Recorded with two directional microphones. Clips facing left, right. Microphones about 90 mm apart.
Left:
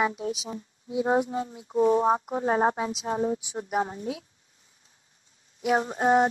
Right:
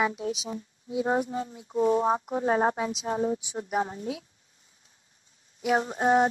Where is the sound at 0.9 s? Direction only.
20° left (ahead or behind).